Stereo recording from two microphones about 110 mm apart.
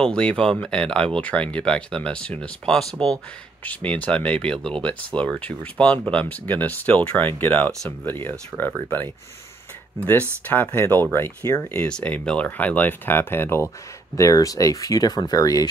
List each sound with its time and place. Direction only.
0.0 s speech: 10° left (ahead or behind)
10.4 s speech: 15° left (ahead or behind)
11.9 s speech: 10° left (ahead or behind); by 15.7 s 35° left (ahead or behind)